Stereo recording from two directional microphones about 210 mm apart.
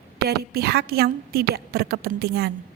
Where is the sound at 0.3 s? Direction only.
50° right (ahead or behind).